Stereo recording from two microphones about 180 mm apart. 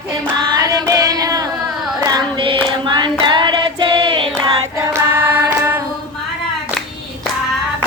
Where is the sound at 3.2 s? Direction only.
25° right (ahead or behind).